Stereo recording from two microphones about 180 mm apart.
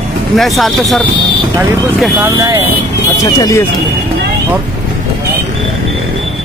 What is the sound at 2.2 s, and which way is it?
Speech, 20° right (ahead or behind).